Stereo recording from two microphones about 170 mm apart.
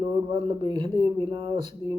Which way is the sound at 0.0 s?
25° right (ahead or behind).